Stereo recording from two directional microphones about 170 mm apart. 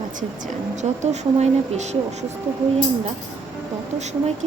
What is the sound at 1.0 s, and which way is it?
Speech, 40° right (ahead or behind).